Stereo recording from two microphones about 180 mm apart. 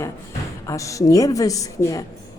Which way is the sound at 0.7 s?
15° left (ahead or behind).